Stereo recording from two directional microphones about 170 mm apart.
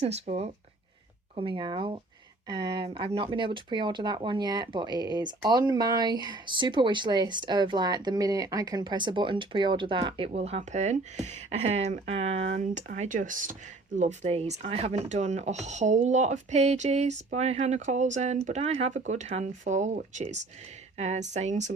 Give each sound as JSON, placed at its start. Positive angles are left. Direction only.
{"t": 0.0, "sound": "speech", "side_deg": -40}